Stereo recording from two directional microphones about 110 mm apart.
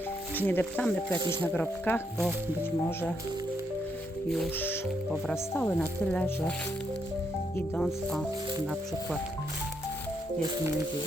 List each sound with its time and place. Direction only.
0.3 s speech: 15° left (ahead or behind)
1.2 s speech: 45° right (ahead or behind)
1.9 s speech: 15° left (ahead or behind)
5.5 s speech: 10° left (ahead or behind)
7.8 s speech: 5° left (ahead or behind)